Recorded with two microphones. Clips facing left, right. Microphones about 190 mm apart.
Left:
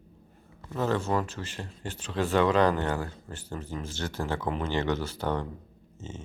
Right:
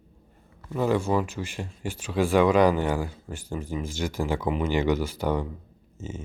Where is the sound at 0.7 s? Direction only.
10° right (ahead or behind).